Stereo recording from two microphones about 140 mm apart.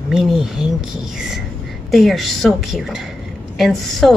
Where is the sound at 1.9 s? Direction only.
Centre (ahead or behind).